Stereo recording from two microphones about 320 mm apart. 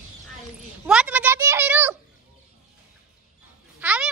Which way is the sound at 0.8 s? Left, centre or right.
Centre.